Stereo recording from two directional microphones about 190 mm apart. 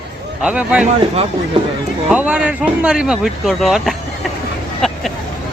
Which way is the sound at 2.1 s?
5° right (ahead or behind).